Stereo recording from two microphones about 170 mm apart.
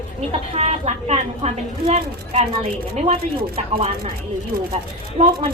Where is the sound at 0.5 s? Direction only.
40° right (ahead or behind).